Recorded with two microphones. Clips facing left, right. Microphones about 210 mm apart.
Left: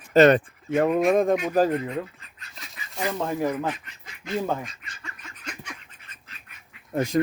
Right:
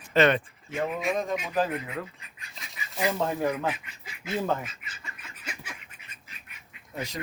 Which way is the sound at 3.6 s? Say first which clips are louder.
Left 2 dB; 10° right (ahead or behind).